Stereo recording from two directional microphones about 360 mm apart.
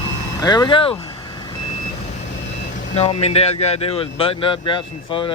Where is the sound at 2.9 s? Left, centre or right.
Centre.